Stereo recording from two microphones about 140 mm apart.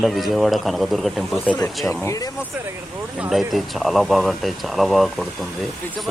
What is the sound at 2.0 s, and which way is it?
Speech, 25° left (ahead or behind).